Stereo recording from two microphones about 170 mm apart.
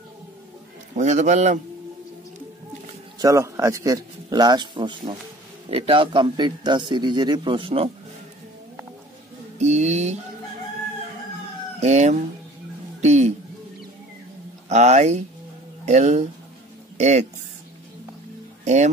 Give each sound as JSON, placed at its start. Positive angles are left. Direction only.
{"t": 0.9, "sound": "a man's voice", "side_deg": -45}
{"t": 3.2, "sound": "a man's voice", "side_deg": -20}
{"t": 9.6, "sound": "a sound", "side_deg": -40}
{"t": 11.8, "sound": "a man's voice", "side_deg": -45}
{"t": 14.7, "sound": "a man's voice", "side_deg": -45}
{"t": 18.6, "sound": "music", "side_deg": -45}